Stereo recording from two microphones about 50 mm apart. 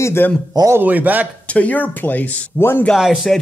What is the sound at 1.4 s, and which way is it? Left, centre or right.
Speech, left.